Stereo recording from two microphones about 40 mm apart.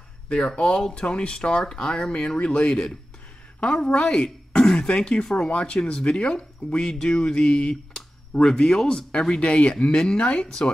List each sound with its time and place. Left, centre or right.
0.6 s a woman's voice: left